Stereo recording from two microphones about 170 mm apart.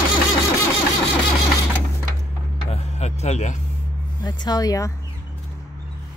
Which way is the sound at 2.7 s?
40° left (ahead or behind).